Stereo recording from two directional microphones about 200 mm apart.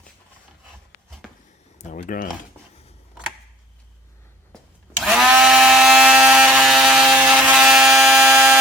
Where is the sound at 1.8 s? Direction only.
35° left (ahead or behind).